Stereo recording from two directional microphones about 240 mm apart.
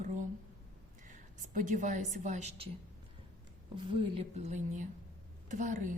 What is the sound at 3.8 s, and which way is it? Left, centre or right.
A woman's voice, right.